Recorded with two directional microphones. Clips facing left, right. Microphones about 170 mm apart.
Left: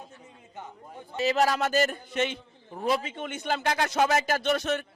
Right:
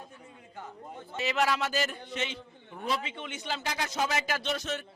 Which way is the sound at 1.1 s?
40° left (ahead or behind).